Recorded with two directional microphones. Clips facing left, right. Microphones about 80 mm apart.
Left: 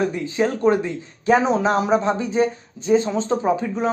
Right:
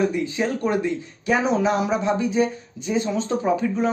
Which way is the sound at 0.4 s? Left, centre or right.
Left.